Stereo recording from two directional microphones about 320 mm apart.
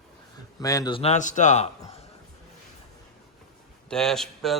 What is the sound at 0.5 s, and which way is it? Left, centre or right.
A man's voice, centre.